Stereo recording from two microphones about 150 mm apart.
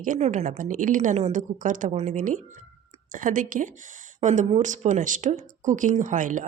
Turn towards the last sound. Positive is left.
turn(degrees=-60)  # may be behind; listen again after turning